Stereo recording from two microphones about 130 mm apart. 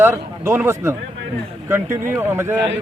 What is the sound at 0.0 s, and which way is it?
A man's voice, 20° right (ahead or behind).